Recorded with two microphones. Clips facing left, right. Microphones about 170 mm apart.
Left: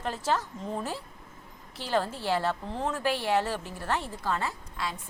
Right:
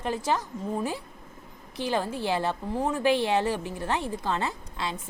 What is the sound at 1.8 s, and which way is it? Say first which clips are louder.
A woman's voice: right 1 dB; 15° right (ahead or behind).